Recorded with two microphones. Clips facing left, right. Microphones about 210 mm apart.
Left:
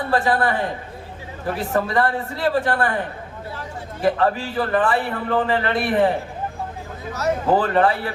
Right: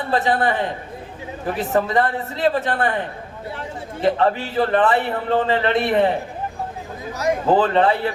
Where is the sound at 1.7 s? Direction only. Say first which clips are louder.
Right 1 dB; 20° right (ahead or behind).